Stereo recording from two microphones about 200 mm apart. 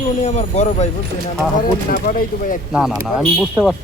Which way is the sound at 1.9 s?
45° left (ahead or behind).